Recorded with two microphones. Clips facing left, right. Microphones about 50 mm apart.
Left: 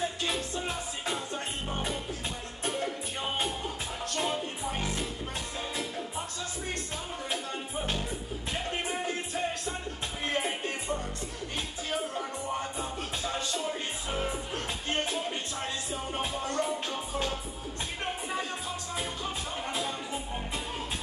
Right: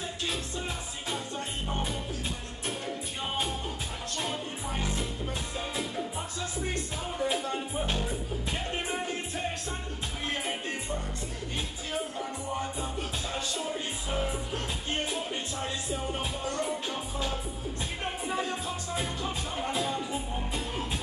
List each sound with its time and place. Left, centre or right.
5.8 s music: centre
16.2 s music: left
18.3 s music: centre